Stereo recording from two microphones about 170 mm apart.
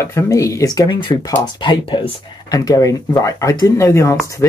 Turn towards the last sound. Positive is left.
turn(degrees=15)  # may be behind; listen again after turning